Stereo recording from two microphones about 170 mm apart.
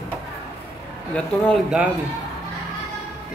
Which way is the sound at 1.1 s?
5° left (ahead or behind).